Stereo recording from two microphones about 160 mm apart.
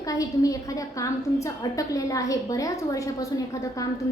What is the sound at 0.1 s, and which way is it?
A woman's voice, 20° left (ahead or behind).